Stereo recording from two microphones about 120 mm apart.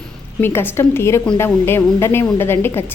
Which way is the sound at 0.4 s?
20° left (ahead or behind).